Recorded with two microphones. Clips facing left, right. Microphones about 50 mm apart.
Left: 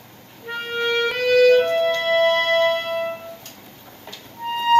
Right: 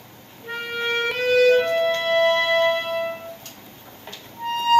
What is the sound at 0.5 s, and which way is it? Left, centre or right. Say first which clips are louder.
Music: left 2 dB; left.